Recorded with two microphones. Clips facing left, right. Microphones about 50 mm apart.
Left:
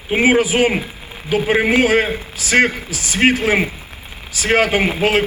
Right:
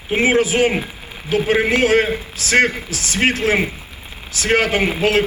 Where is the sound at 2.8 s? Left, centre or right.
Right.